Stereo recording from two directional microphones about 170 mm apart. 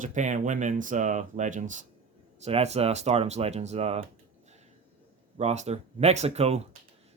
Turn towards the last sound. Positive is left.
turn(degrees=-40)  # may be behind; listen again after turning